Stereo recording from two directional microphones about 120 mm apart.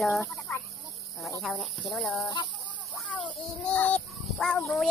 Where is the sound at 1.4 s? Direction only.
Centre (ahead or behind).